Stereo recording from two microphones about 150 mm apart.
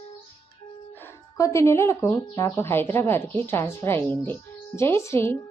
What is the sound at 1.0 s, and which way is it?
A woman's voice, 20° left (ahead or behind).